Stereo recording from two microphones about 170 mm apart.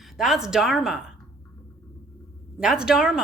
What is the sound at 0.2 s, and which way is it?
Speech, centre (ahead or behind).